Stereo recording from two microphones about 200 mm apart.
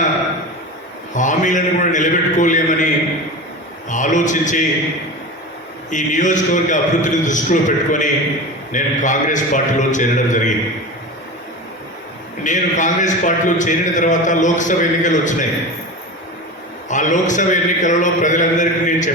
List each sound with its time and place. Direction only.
1.1 s a sound: 40° left (ahead or behind)
5.9 s a man's voice: 40° left (ahead or behind)
12.4 s a man's voice: 40° left (ahead or behind)
16.9 s a man's voice: 40° left (ahead or behind)